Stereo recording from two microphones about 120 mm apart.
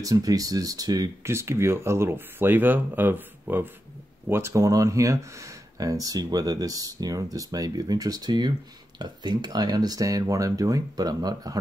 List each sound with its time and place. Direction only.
0.0 s speech: 30° right (ahead or behind)